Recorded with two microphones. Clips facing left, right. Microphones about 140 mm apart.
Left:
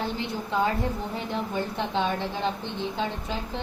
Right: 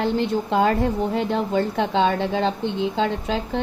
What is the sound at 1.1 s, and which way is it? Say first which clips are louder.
A woman's voice: right 8 dB; 90° right.